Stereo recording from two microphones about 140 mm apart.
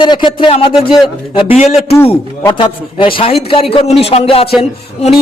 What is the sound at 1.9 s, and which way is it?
Speech, 20° left (ahead or behind).